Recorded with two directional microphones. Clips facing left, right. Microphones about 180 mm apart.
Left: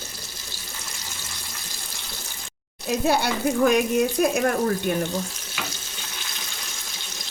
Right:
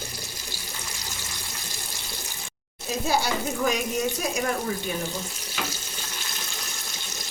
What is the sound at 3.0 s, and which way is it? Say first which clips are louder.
Speech: left 3 dB; 60° left (ahead or behind).